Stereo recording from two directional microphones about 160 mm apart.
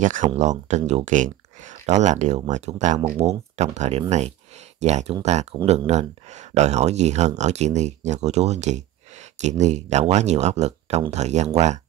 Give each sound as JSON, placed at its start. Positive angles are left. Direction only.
{"t": 0.0, "sound": "speech", "side_deg": -50}